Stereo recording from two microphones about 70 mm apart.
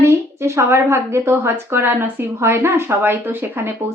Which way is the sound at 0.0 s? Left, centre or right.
Right.